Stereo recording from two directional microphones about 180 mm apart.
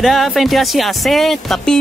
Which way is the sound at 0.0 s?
Centre (ahead or behind).